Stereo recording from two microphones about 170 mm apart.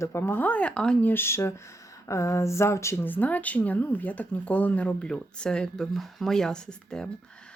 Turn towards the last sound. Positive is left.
turn(degrees=5)  # may be behind; listen again after turning